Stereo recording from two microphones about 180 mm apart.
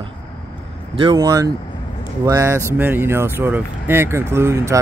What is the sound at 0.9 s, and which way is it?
Speech, 25° right (ahead or behind).